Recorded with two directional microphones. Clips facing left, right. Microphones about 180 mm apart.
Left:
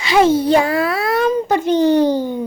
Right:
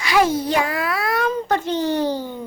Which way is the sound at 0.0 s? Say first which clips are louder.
Left 5 dB; 25° left (ahead or behind).